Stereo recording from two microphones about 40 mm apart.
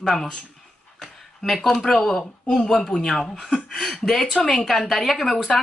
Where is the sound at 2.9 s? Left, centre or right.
Centre.